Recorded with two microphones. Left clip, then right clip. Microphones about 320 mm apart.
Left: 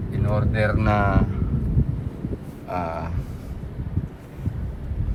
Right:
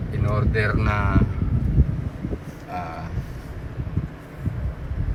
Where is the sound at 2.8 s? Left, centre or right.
Left.